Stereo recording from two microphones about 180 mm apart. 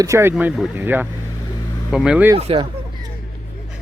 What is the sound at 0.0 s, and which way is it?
Speech, 15° right (ahead or behind).